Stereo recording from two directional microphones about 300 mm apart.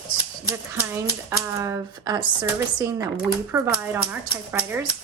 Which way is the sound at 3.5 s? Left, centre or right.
Centre.